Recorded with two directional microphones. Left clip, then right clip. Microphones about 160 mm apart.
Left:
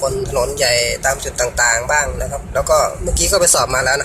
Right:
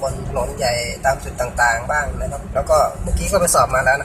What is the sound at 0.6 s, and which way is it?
Speech, 15° left (ahead or behind).